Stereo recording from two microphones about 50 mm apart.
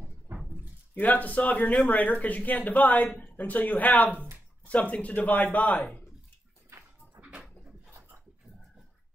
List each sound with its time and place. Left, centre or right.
0.9 s speech: left
7.2 s cupboard open or close: right